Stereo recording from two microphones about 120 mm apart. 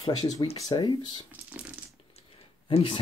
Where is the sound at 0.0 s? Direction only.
40° left (ahead or behind).